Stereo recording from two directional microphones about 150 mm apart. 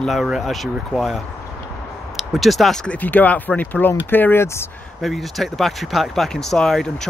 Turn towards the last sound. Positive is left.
turn(degrees=5)  # may be behind; listen again after turning